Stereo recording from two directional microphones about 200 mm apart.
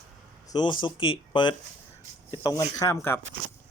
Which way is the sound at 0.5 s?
25° left (ahead or behind).